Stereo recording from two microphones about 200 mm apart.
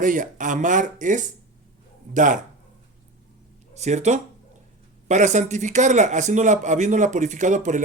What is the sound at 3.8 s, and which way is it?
A man's voice, 35° right (ahead or behind).